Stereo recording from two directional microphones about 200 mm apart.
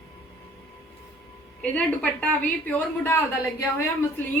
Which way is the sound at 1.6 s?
5° left (ahead or behind).